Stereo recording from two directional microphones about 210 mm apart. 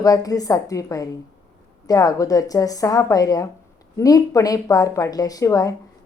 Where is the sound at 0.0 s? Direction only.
15° left (ahead or behind).